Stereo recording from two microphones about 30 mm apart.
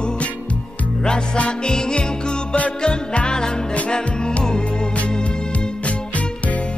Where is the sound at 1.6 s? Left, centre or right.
Left.